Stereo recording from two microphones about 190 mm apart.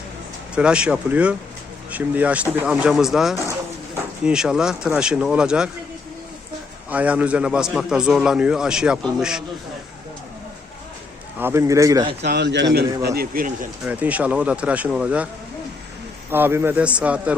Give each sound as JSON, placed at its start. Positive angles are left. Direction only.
{"t": 0.5, "sound": "a man's voice", "side_deg": -5}
{"t": 6.9, "sound": "a man's voice", "side_deg": -5}
{"t": 11.3, "sound": "speech", "side_deg": -15}
{"t": 12.2, "sound": "a man's voice", "side_deg": -60}
{"t": 13.8, "sound": "speech", "side_deg": -10}
{"t": 16.3, "sound": "speech", "side_deg": -10}